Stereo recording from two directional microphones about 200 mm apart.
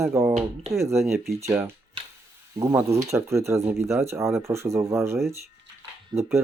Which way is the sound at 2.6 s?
15° right (ahead or behind).